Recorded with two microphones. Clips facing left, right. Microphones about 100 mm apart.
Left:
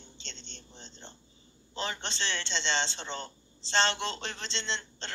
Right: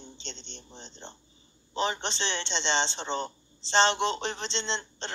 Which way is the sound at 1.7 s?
25° right (ahead or behind).